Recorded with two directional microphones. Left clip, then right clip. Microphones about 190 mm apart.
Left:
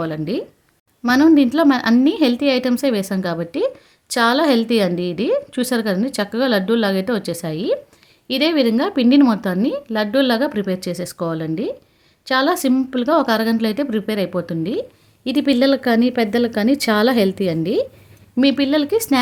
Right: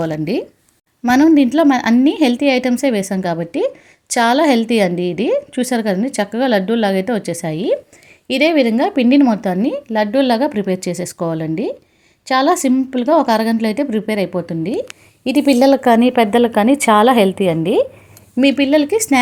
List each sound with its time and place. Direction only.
0.0 s a woman's voice: 15° right (ahead or behind)